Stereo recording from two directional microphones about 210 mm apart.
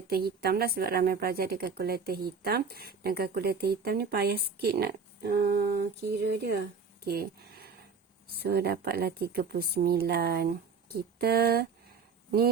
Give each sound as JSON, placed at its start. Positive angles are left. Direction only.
{"t": 0.1, "sound": "speech", "side_deg": -45}